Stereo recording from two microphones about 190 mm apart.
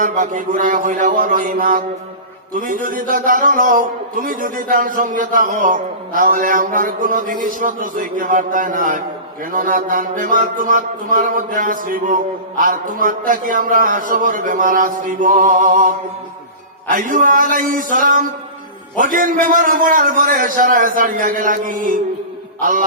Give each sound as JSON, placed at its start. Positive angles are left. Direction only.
{"t": 0.0, "sound": "mantra", "side_deg": -40}